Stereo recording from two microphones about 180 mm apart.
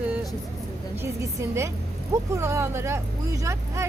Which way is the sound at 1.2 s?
15° right (ahead or behind).